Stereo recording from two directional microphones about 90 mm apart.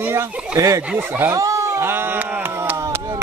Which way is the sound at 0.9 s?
20° right (ahead or behind).